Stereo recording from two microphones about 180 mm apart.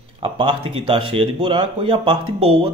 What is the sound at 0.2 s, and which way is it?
A man's voice, 30° right (ahead or behind).